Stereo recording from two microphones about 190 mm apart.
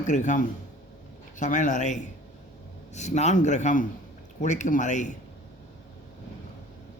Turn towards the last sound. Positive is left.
turn(degrees=40)  # may be behind; listen again after turning